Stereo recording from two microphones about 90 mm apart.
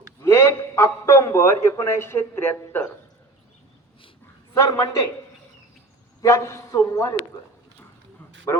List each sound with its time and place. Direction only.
0.2 s a sound: 30° left (ahead or behind)
4.5 s a man's voice: 35° left (ahead or behind)
6.2 s a man's voice: 35° left (ahead or behind)